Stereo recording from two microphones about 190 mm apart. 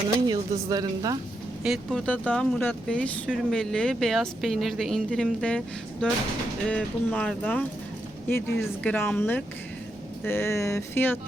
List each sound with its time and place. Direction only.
0.3 s a woman's voice: 20° right (ahead or behind)
1.6 s a woman's voice: centre (ahead or behind)